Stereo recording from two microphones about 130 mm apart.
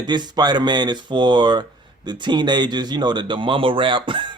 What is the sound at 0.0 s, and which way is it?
Speech, 35° right (ahead or behind).